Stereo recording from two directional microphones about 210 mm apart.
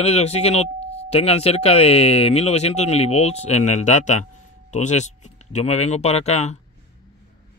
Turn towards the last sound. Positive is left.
turn(degrees=30)  # may be behind; listen again after turning